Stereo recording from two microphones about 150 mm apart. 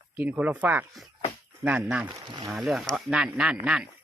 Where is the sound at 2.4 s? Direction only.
Centre (ahead or behind).